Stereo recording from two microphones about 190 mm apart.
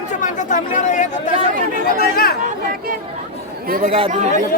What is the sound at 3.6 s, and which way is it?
Speech, 50° right (ahead or behind).